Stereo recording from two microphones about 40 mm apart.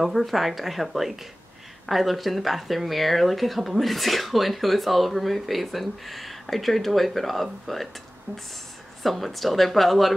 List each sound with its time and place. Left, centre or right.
0.0 s speech: centre
8.3 s a sound: right
9.0 s speech: centre